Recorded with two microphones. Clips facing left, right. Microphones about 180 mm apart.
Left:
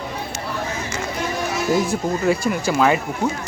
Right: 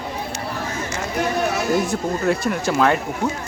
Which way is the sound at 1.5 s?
60° right (ahead or behind).